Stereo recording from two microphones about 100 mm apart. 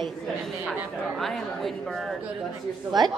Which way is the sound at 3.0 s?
45° right (ahead or behind).